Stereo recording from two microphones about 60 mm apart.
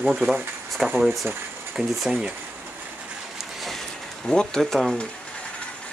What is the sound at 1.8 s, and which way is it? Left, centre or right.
Speech, centre.